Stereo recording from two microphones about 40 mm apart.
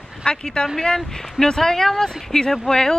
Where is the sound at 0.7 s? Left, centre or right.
Centre.